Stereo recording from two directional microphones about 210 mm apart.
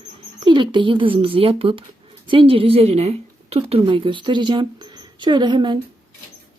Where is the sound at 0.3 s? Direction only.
20° right (ahead or behind).